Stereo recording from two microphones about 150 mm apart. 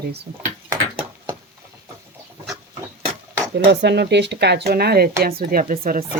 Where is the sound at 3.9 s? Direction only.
90° right.